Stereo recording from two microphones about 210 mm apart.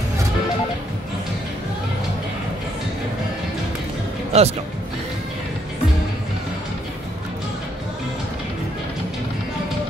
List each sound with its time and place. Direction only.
4.3 s a man's voice: 30° right (ahead or behind)